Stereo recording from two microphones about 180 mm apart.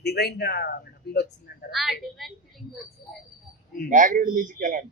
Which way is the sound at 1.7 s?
Centre (ahead or behind).